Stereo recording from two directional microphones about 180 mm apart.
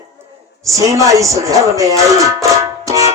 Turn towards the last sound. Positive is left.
turn(degrees=-20)  # may be behind; listen again after turning